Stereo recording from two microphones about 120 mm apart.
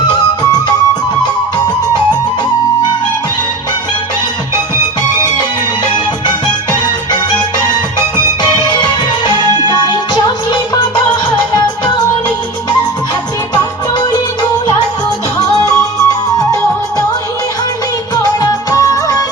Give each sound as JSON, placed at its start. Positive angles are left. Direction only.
{"t": 8.1, "sound": "music", "side_deg": 35}
{"t": 15.4, "sound": "music", "side_deg": 30}
{"t": 18.2, "sound": "music", "side_deg": 25}